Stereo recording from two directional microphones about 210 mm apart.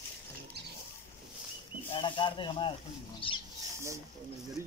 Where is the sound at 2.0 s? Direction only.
25° left (ahead or behind).